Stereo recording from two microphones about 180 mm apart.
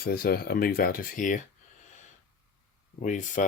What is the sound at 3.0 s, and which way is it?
Speech, 45° left (ahead or behind).